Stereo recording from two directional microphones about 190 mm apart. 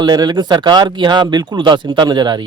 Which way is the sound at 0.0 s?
20° right (ahead or behind).